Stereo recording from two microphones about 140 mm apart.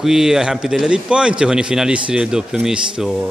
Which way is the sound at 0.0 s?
5° right (ahead or behind).